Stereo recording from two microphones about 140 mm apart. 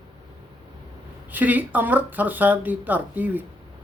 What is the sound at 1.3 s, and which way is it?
Speech, 10° right (ahead or behind).